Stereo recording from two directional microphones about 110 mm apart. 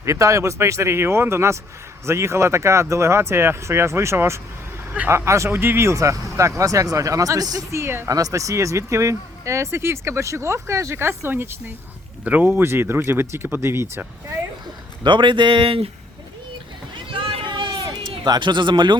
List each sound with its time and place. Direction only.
0.0 s speech: 30° right (ahead or behind)
15.0 s speech: 45° right (ahead or behind)
16.9 s run: 55° right (ahead or behind)
18.3 s speech: 45° right (ahead or behind)